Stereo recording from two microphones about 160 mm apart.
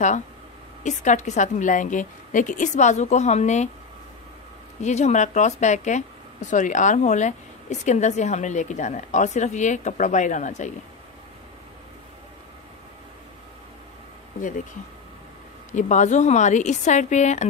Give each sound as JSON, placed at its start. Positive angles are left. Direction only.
{"t": 0.8, "sound": "a woman's voice", "side_deg": 50}
{"t": 4.8, "sound": "a woman's voice", "side_deg": 45}
{"t": 15.7, "sound": "a woman's voice", "side_deg": 50}